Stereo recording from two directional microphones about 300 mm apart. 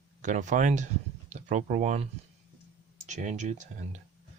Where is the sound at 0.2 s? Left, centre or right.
Right.